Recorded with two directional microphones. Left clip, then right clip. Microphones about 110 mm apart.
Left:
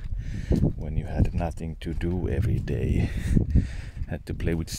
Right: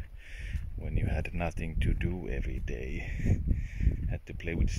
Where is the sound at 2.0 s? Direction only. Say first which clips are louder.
Left 11 dB; 25° left (ahead or behind).